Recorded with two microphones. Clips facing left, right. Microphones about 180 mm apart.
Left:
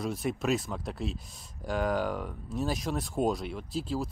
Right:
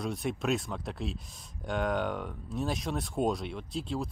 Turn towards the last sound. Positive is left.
turn(degrees=0)  # may be behind; listen again after turning